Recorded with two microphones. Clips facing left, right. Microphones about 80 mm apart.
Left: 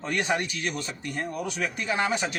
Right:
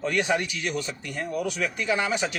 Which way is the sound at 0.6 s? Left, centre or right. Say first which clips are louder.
Right 2 dB; left.